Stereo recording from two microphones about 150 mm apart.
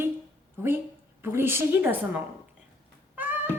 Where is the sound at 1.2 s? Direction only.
15° right (ahead or behind).